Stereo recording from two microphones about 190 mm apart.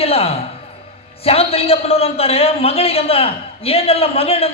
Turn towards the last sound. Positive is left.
turn(degrees=30)  # may be behind; listen again after turning